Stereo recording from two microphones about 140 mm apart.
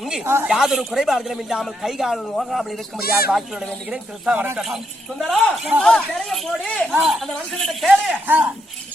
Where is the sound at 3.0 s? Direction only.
90° left.